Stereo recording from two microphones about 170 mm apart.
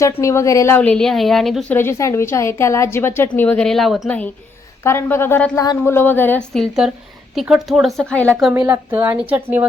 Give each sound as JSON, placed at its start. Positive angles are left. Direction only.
{"t": 0.2, "sound": "a woman's voice", "side_deg": 20}
{"t": 1.7, "sound": "a woman's voice", "side_deg": 15}
{"t": 4.8, "sound": "a woman's voice", "side_deg": 15}
{"t": 8.5, "sound": "speech", "side_deg": -20}